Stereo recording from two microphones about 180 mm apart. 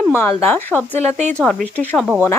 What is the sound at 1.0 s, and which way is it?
Speech, 40° right (ahead or behind).